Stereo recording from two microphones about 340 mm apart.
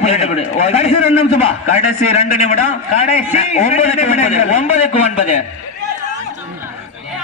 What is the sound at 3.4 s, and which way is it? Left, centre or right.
A man's voice, centre.